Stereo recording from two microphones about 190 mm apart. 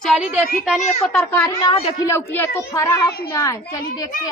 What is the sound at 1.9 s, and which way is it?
Speech, 15° left (ahead or behind).